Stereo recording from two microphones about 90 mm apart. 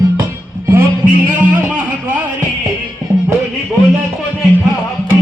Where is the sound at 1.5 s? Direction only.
15° right (ahead or behind).